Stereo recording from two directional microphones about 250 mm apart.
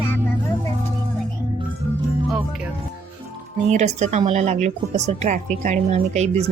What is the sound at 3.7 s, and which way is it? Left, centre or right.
A woman's voice, right.